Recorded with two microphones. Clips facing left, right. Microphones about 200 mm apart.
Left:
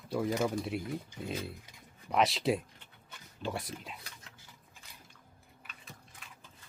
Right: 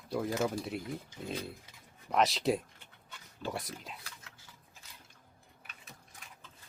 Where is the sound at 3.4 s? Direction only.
20° left (ahead or behind).